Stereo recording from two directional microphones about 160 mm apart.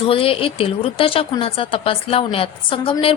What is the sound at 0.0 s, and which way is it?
Speech, 35° left (ahead or behind).